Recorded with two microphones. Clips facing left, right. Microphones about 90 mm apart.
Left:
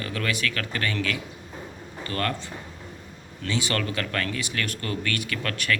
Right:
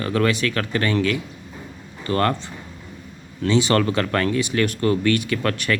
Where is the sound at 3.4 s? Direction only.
25° right (ahead or behind).